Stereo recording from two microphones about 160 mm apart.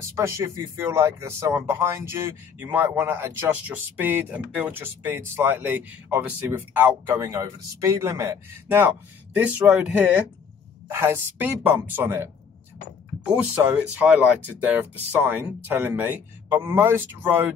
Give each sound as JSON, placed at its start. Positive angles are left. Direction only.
{"t": 0.0, "sound": "a man's voice", "side_deg": -15}
{"t": 13.9, "sound": "a man's voice", "side_deg": -5}